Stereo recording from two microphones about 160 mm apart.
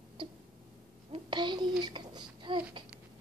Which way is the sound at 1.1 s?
30° right (ahead or behind).